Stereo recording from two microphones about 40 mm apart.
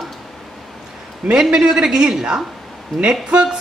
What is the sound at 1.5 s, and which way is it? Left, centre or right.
Speech, centre.